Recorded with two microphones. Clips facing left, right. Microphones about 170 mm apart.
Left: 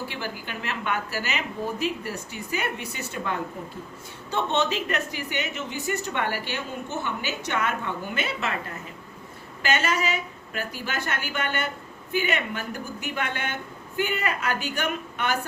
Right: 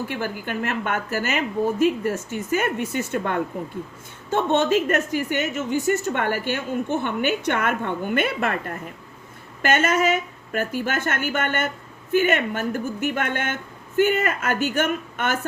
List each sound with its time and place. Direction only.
0.1 s a woman's voice: 50° right (ahead or behind)